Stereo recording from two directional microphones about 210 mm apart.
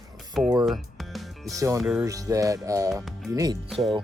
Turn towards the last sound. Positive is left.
turn(degrees=0)  # may be behind; listen again after turning